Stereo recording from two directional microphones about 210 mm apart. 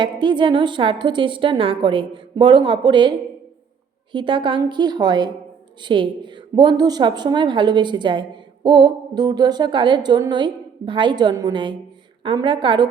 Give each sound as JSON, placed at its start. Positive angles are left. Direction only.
{"t": 0.0, "sound": "a woman's voice", "side_deg": -20}
{"t": 4.1, "sound": "a woman's voice", "side_deg": -20}